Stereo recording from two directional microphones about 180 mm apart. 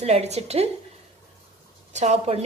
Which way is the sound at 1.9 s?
35° right (ahead or behind).